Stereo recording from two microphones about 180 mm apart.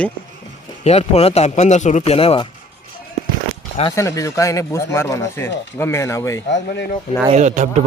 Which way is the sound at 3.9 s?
15° left (ahead or behind).